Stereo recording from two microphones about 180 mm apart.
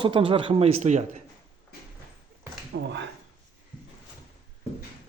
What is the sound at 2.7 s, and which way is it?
Speech, 80° right.